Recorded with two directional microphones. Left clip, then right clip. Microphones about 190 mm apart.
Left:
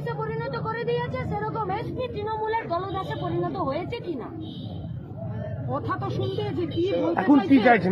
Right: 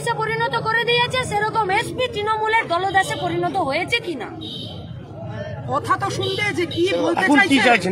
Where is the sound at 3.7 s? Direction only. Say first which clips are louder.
Right 9 dB; 15° right (ahead or behind).